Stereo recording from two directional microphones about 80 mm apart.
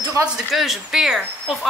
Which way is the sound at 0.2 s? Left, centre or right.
Right.